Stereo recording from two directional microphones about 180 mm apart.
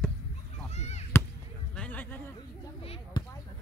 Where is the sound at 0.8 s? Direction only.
40° left (ahead or behind).